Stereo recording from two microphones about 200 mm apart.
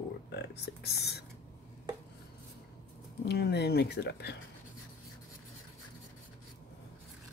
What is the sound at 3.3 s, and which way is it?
Speech, 55° left (ahead or behind).